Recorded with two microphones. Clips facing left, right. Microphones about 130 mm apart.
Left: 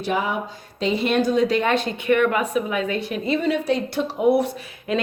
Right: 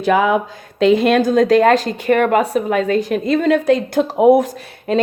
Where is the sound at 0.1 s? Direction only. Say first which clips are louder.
Right 10 dB; 80° right.